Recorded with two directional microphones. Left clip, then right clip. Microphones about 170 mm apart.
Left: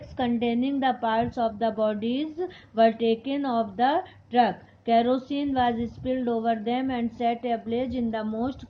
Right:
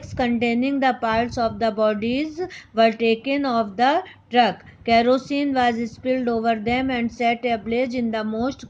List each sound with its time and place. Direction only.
0.2 s a woman's voice: 40° right (ahead or behind)